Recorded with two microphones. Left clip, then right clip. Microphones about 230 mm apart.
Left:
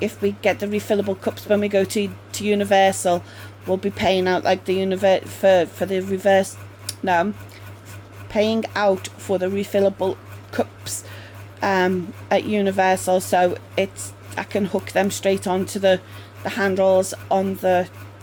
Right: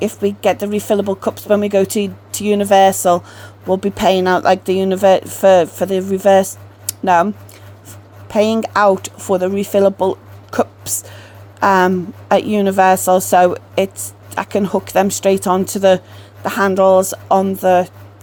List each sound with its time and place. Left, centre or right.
0.0 s speech: right
8.3 s speech: right